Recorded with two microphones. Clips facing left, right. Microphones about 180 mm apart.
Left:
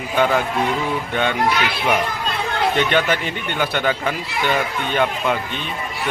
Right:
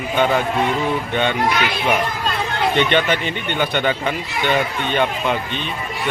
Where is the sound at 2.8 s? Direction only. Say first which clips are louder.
Right 3 dB; 5° left (ahead or behind).